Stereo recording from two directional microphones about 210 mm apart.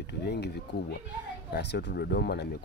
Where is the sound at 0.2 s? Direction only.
50° left (ahead or behind).